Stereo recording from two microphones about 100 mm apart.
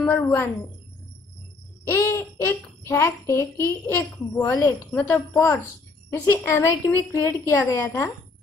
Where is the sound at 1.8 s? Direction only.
25° left (ahead or behind).